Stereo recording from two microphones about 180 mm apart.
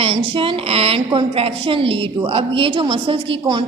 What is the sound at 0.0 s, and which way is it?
A woman's voice, 30° right (ahead or behind).